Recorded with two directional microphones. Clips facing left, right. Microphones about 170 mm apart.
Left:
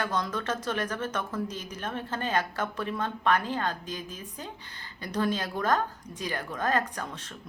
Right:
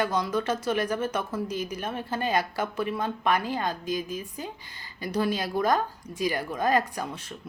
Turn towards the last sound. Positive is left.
turn(degrees=-10)  # may be behind; listen again after turning